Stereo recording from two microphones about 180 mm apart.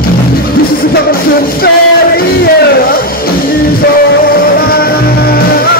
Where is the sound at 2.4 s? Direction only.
55° left (ahead or behind).